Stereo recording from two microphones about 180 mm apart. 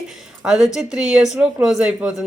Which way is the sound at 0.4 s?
5° right (ahead or behind).